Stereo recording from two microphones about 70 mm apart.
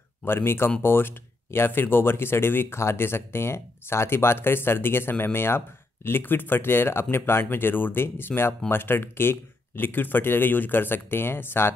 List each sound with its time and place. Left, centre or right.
0.2 s speech: left